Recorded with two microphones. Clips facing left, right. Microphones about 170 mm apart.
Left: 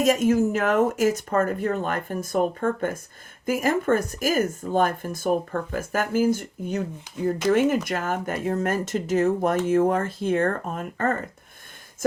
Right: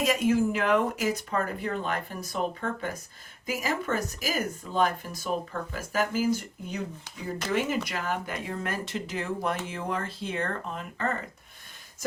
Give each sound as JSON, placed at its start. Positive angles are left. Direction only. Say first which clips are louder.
{"t": 0.0, "sound": "speech", "louder": "left 5 dB", "side_deg": 45}